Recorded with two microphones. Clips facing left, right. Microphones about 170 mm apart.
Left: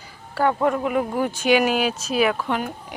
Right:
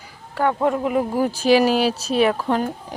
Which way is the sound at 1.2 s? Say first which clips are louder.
Right 3 dB; 35° right (ahead or behind).